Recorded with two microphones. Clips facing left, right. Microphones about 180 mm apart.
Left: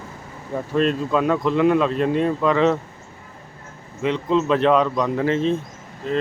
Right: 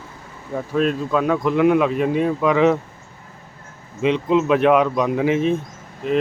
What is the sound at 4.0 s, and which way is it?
Speech, 15° right (ahead or behind).